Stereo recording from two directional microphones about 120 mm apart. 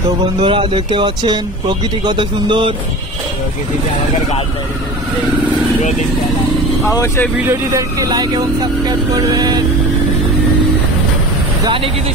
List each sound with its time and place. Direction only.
0.4 s speech: 45° right (ahead or behind)
6.8 s speech: 25° left (ahead or behind)
7.4 s speech: 30° right (ahead or behind)
11.6 s speech: 45° right (ahead or behind)